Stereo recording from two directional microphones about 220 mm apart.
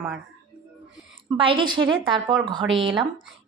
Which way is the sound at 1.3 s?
25° right (ahead or behind).